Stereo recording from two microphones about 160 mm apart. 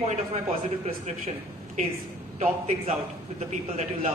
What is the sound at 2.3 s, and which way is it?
A man's voice, 40° right (ahead or behind).